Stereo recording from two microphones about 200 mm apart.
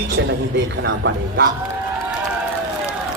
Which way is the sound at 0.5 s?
60° right (ahead or behind).